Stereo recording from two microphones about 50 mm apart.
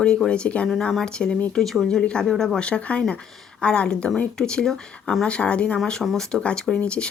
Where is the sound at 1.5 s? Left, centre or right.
Centre.